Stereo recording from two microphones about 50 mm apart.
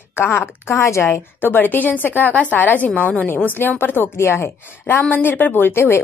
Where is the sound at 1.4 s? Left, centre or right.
Left.